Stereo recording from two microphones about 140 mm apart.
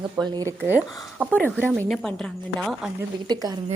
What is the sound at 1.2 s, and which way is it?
Speech, 15° right (ahead or behind).